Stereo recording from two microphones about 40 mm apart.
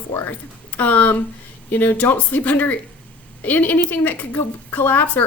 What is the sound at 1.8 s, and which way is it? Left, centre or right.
A woman's voice, left.